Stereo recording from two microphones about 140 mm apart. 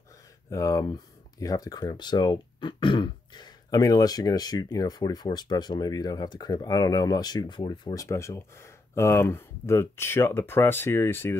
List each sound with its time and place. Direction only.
0.5 s speech: 25° left (ahead or behind)